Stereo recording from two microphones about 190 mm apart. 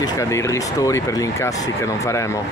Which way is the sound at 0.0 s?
15° left (ahead or behind).